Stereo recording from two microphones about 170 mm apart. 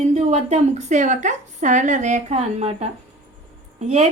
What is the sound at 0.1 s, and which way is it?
A woman's voice, 40° right (ahead or behind).